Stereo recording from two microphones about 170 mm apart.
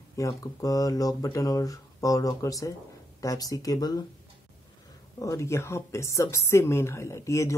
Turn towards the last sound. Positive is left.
turn(degrees=15)  # may be behind; listen again after turning